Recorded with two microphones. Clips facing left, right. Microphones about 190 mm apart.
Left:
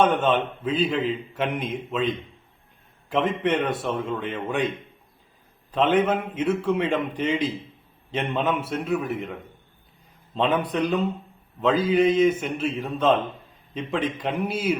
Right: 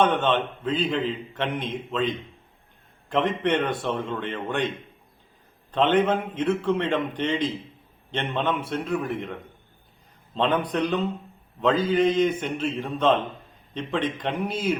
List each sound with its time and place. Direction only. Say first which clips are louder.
0.0 s a man's voice: left 1 dB; 10° left (ahead or behind)
5.7 s a man's voice: even; 5° left (ahead or behind)